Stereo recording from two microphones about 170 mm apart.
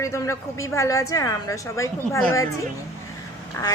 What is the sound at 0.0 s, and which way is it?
A woman's voice, 15° left (ahead or behind).